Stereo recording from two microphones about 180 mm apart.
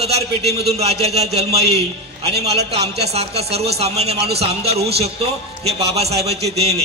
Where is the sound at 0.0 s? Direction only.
35° right (ahead or behind).